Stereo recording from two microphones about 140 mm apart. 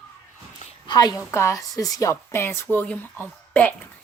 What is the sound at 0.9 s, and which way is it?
A woman's voice, 30° left (ahead or behind).